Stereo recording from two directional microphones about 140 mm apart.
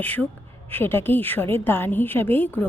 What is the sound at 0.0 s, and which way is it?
A woman's voice, 10° left (ahead or behind).